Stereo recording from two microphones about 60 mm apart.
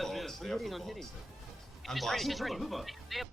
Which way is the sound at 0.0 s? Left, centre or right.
Centre.